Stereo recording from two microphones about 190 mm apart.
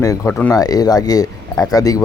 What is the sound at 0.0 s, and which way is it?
Speech, 15° left (ahead or behind).